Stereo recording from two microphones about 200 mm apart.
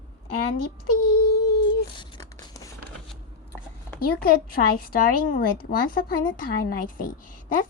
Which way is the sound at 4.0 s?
50° left (ahead or behind).